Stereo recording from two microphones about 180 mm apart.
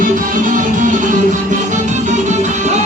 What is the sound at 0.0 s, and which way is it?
Music, 45° right (ahead or behind).